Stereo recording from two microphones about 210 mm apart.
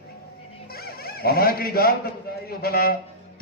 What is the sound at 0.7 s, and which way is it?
Zipper, 45° left (ahead or behind).